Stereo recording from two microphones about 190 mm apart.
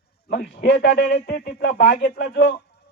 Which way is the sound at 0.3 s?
60° left (ahead or behind).